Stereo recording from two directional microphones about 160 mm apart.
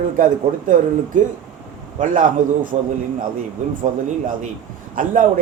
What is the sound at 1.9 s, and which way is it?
Speech, 55° right (ahead or behind).